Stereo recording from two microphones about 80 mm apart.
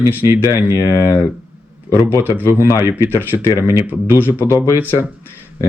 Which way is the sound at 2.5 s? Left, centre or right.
Left.